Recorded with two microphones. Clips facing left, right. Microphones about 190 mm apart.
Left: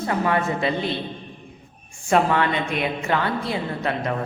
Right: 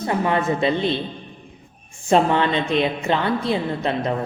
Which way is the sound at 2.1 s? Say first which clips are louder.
Right 2 dB; 25° right (ahead or behind).